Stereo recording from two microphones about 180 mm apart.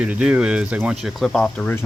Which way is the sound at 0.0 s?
5° right (ahead or behind).